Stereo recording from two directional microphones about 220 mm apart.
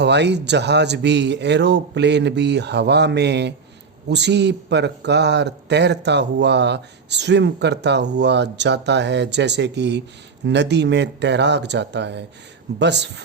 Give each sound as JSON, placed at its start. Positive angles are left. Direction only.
{"t": 0.0, "sound": "a man's voice", "side_deg": -50}